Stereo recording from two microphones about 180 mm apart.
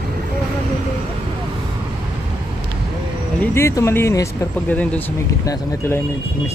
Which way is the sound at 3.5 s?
15° left (ahead or behind).